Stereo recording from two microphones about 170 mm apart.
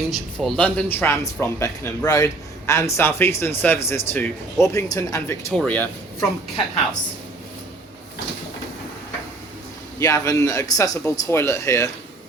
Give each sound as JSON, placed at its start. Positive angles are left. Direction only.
{"t": 0.1, "sound": "speech", "side_deg": 5}
{"t": 10.0, "sound": "speech", "side_deg": 20}